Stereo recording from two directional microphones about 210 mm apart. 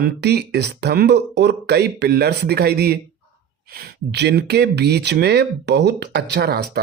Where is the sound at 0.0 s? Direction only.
50° right (ahead or behind).